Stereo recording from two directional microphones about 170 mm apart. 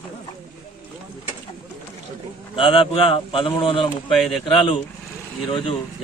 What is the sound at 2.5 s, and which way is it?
A man's voice, 30° left (ahead or behind).